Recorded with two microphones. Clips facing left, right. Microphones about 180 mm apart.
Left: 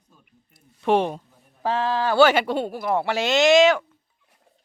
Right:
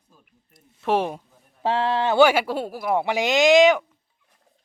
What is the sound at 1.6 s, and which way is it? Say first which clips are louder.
Speech: right 1 dB; 25° right (ahead or behind).